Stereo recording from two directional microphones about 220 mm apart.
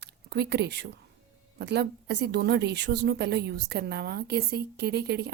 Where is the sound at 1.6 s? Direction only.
50° right (ahead or behind).